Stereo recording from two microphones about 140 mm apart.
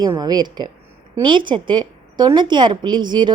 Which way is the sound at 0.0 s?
30° right (ahead or behind).